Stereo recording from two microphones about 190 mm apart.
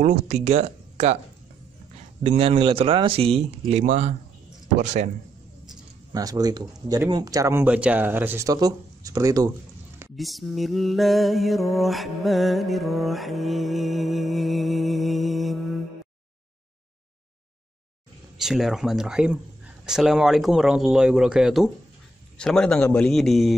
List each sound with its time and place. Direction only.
0.0 s speech: 35° right (ahead or behind)
2.2 s speech: 30° right (ahead or behind)
5.7 s speech: 20° right (ahead or behind)
10.1 s mantra: centre (ahead or behind)
18.4 s mantra: centre (ahead or behind)